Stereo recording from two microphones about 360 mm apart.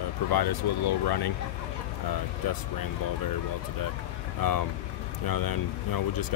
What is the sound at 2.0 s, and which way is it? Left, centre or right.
Speech, left.